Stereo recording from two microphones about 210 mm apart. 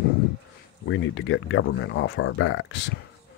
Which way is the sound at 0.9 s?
65° left (ahead or behind).